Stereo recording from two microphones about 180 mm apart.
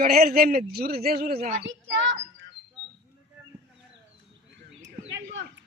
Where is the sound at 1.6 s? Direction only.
85° right.